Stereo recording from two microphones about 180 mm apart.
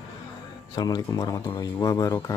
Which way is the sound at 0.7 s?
20° left (ahead or behind).